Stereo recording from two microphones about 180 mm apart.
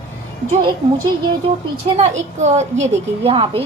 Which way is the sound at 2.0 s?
40° right (ahead or behind).